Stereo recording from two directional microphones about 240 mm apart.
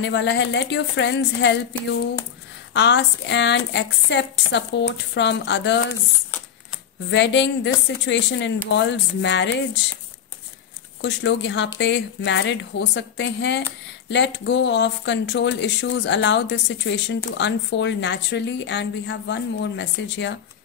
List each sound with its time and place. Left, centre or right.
0.0 s speech: left
7.1 s speech: left
11.1 s speech: left